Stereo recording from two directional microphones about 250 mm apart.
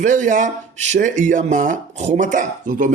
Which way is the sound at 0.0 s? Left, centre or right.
Right.